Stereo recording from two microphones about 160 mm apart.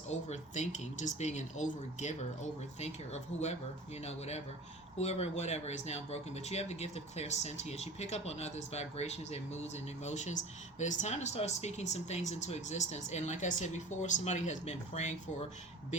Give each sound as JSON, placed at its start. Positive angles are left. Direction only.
{"t": 0.1, "sound": "speech", "side_deg": 45}